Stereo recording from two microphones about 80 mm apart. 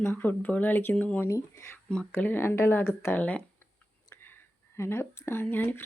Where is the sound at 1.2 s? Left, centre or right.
Left.